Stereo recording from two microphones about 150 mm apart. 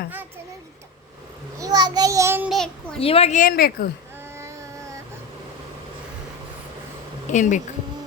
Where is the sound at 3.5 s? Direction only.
90° left.